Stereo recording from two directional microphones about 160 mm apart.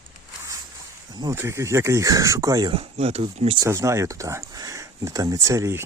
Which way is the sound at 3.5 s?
20° right (ahead or behind).